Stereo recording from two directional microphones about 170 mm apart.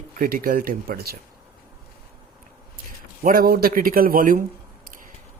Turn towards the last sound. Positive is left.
turn(degrees=-55)  # may be behind; listen again after turning